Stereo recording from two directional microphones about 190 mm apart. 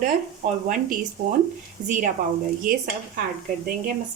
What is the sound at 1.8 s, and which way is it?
Speech, 20° right (ahead or behind).